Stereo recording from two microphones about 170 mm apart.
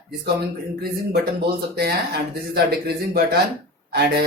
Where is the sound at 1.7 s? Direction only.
65° right (ahead or behind).